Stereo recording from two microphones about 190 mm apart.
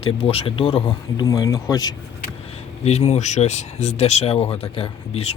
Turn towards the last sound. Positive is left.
turn(degrees=35)  # may be behind; listen again after turning